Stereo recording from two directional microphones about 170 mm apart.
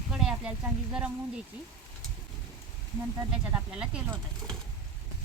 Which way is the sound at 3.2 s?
5° right (ahead or behind).